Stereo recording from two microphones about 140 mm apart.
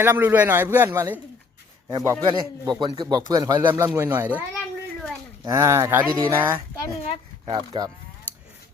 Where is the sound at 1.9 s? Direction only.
30° right (ahead or behind); by 4.4 s 10° right (ahead or behind).